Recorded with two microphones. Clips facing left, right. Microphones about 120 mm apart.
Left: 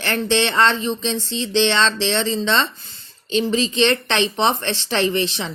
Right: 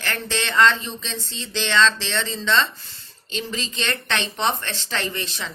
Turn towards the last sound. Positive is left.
turn(degrees=25)  # may be behind; listen again after turning